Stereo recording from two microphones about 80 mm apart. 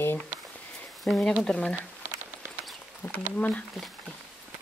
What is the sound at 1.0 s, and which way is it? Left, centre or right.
Speech, centre.